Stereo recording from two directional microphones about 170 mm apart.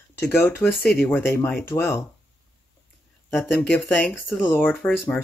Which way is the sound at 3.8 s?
10° left (ahead or behind).